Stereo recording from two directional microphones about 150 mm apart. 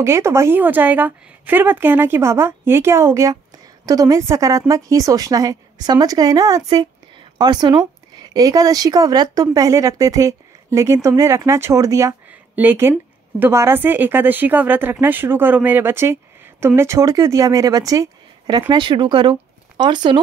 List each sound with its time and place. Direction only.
0.0 s a woman's voice: 15° right (ahead or behind)